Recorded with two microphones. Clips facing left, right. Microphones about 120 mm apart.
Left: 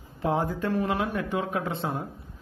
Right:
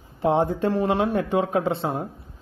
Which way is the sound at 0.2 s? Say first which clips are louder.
Right 6 dB; 30° right (ahead or behind).